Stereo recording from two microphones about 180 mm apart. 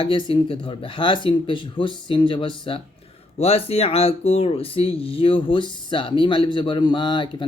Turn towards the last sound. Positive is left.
turn(degrees=25)  # may be behind; listen again after turning